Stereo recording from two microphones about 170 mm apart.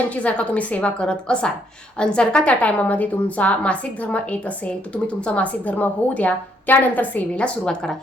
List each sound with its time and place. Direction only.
0.1 s a woman's voice: 10° left (ahead or behind)